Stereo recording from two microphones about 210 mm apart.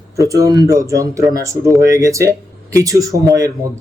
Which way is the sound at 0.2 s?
15° right (ahead or behind).